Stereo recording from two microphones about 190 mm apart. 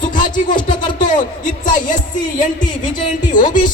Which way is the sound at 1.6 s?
45° left (ahead or behind).